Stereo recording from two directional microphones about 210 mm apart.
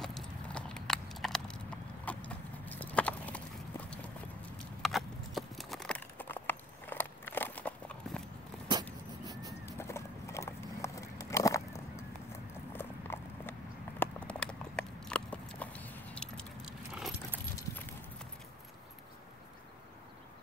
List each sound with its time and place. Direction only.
0.0 s horse: 5° left (ahead or behind)
2.0 s clip-clop: 5° left (ahead or behind)
4.8 s clip-clop: centre (ahead or behind)
9.2 s vehicle: 15° right (ahead or behind)
9.7 s horse: 10° left (ahead or behind)
12.7 s clip-clop: 10° left (ahead or behind)
16.9 s keys jangling: 5° right (ahead or behind)